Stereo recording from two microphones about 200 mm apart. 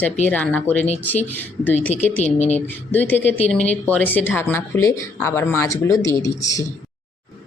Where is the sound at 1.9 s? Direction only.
35° left (ahead or behind).